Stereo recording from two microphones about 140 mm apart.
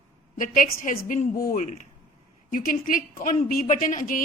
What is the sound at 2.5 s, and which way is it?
A woman's voice, 80° left.